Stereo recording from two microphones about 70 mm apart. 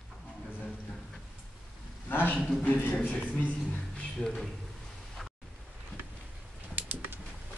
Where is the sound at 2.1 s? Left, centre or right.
Left.